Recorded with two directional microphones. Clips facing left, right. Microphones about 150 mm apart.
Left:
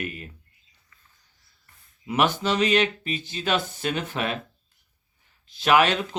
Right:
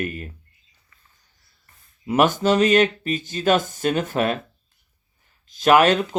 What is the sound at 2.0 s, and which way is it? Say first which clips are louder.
Speech: right 5 dB; 45° right (ahead or behind).